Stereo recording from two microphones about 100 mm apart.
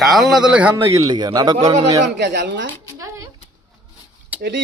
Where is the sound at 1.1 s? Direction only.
45° right (ahead or behind).